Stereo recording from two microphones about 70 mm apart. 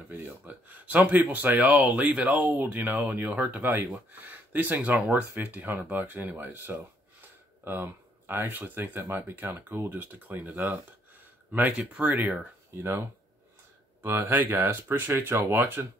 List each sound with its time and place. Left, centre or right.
0.1 s speech: right
11.7 s speech: centre
12.1 s speech: right
12.7 s speech: right